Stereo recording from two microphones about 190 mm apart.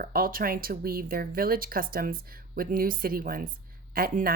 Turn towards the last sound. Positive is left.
turn(degrees=-50)  # may be behind; listen again after turning